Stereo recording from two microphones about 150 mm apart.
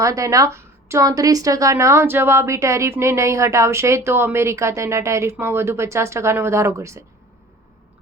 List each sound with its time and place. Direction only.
0.0 s a woman's voice: 20° right (ahead or behind)